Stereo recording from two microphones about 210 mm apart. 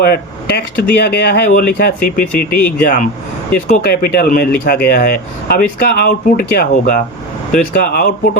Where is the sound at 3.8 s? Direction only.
45° left (ahead or behind).